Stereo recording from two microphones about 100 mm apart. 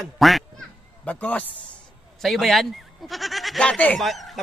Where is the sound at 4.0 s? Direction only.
Centre (ahead or behind).